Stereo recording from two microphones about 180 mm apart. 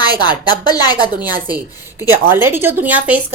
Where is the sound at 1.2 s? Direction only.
10° right (ahead or behind).